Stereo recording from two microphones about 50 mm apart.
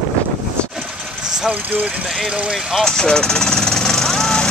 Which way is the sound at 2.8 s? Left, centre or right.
Centre.